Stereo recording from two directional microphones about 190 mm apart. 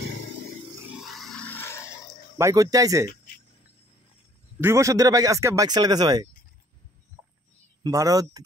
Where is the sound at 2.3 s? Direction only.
15° right (ahead or behind).